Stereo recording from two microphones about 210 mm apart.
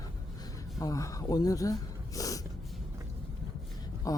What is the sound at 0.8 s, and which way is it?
Speech, 15° left (ahead or behind).